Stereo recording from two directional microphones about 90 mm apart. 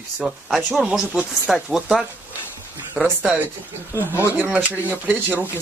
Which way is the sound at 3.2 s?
15° right (ahead or behind).